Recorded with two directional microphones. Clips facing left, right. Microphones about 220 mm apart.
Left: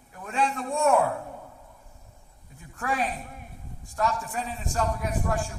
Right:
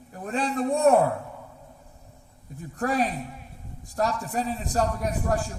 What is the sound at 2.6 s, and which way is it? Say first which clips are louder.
A man's voice: right 4 dB; 40° right (ahead or behind).